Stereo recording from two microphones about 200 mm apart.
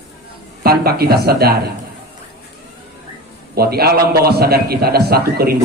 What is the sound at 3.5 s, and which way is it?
A man's voice, 50° right (ahead or behind).